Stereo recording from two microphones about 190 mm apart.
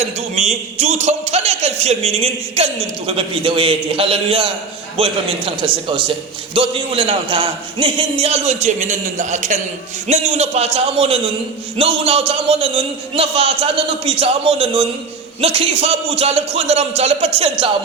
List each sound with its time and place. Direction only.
0.0 s a man's voice: 35° right (ahead or behind)